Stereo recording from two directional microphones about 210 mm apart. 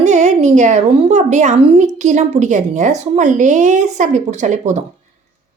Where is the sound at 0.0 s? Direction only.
35° right (ahead or behind).